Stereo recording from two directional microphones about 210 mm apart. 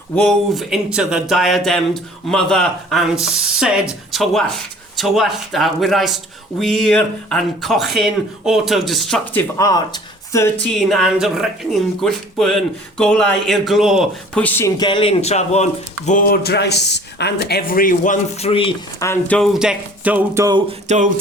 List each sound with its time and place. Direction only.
0.2 s speech: centre (ahead or behind)
14.8 s a man's voice: 25° left (ahead or behind)
18.9 s speech: 10° left (ahead or behind); by 20.6 s 15° right (ahead or behind)
20.8 s speech: 35° right (ahead or behind)